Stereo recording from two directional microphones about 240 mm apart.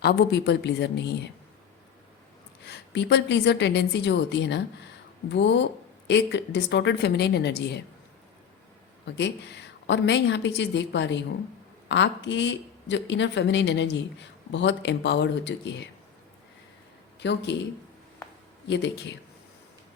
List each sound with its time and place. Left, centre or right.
0.0 s speech: left
2.6 s speech: left
9.0 s speech: left
17.2 s speech: left
18.7 s speech: left